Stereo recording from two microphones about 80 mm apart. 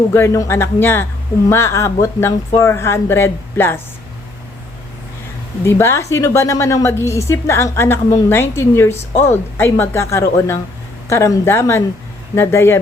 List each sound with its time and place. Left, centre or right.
0.1 s speech: left
5.6 s speech: left